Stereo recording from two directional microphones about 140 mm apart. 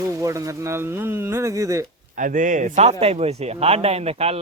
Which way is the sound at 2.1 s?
70° right (ahead or behind).